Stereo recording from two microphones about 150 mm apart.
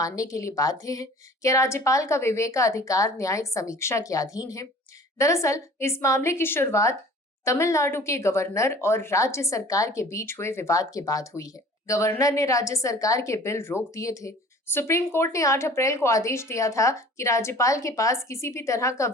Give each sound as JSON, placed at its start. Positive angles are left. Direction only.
{"t": 0.0, "sound": "speech", "side_deg": 20}